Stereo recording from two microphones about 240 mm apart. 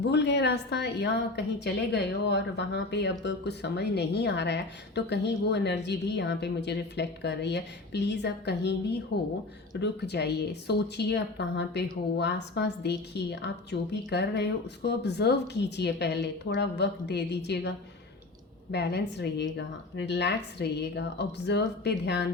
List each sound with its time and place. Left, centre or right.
0.0 s a woman's voice: left